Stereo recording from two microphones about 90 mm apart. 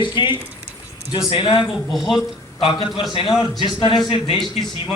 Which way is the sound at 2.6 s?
60° left (ahead or behind).